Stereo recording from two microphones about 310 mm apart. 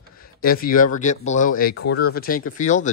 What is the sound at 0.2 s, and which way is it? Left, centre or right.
Speech, left.